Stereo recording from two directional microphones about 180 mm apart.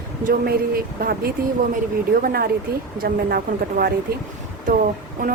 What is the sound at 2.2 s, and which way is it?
Speech, 55° right (ahead or behind).